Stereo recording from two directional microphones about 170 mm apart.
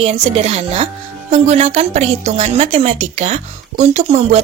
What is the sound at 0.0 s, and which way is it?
Speech, 40° right (ahead or behind).